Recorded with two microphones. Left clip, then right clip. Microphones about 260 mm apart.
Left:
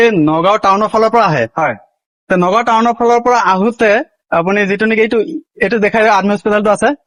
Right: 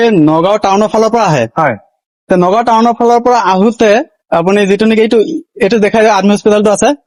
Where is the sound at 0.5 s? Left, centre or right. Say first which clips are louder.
Right 2 dB; right.